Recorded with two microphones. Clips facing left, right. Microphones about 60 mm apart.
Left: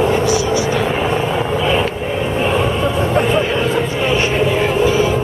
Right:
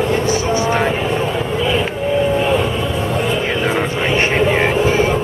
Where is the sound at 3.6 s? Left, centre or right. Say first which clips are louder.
Left 1 dB; right.